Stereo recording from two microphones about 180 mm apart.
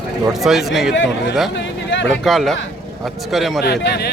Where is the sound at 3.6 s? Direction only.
70° left (ahead or behind).